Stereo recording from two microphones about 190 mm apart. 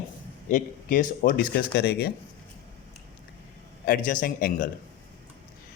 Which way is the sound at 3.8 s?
45° left (ahead or behind).